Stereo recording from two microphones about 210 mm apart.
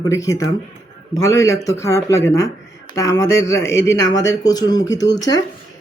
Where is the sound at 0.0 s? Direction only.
15° left (ahead or behind).